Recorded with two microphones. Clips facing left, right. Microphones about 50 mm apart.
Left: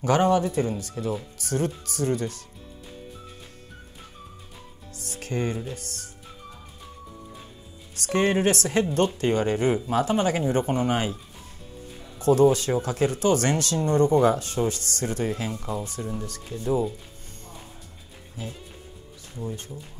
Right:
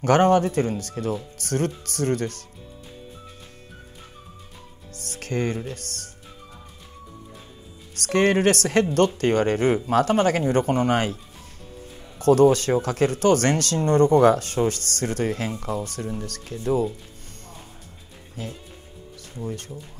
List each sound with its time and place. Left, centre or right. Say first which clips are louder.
0.0 s speech: right 3 dB; right
4.9 s music: right 2 dB; right
5.7 s speech: right 1 dB; right
7.9 s speech: right 3 dB; right
12.2 s speech: right 3 dB; right
19.7 s speech: right 2 dB; centre